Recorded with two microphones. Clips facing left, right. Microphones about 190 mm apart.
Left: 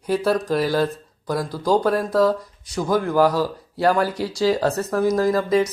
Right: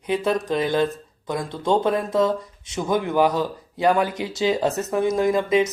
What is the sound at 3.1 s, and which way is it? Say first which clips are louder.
Speech: left 2 dB; 20° right (ahead or behind).